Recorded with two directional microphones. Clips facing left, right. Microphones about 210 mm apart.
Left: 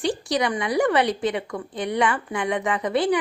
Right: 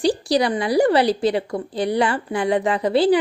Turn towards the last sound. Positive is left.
turn(degrees=-30)  # may be behind; listen again after turning